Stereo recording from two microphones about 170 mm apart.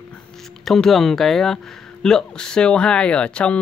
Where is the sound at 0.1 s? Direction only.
5° left (ahead or behind).